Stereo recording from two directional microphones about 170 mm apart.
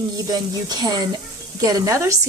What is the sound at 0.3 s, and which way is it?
Speech, 20° right (ahead or behind).